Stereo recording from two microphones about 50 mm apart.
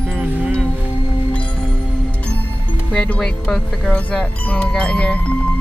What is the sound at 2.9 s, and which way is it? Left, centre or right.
Speech, centre.